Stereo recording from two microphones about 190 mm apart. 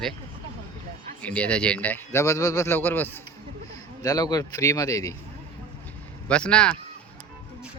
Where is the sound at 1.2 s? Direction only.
5° left (ahead or behind).